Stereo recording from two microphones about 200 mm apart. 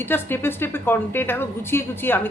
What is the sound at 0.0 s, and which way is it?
A woman's voice, 10° left (ahead or behind).